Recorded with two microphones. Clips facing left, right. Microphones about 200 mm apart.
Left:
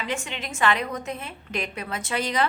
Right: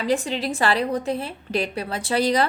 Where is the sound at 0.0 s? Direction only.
35° right (ahead or behind).